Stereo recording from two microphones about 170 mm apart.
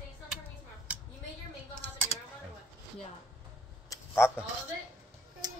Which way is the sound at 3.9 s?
15° left (ahead or behind).